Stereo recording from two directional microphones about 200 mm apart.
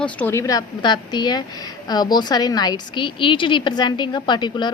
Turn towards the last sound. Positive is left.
turn(degrees=20)  # may be behind; listen again after turning